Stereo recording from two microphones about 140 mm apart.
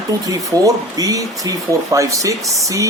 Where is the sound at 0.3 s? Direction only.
25° right (ahead or behind).